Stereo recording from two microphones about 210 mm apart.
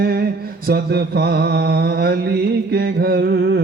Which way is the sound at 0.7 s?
50° right (ahead or behind).